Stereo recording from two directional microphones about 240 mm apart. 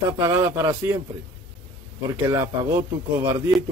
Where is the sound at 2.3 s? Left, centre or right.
Centre.